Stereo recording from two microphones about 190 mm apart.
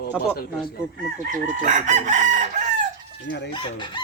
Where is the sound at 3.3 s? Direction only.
65° left (ahead or behind).